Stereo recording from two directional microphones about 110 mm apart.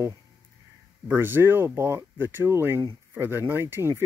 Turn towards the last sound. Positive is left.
turn(degrees=-25)  # may be behind; listen again after turning